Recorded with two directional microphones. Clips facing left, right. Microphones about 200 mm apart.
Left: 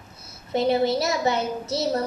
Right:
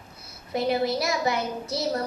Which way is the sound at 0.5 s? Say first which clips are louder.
Left 3 dB; 25° left (ahead or behind).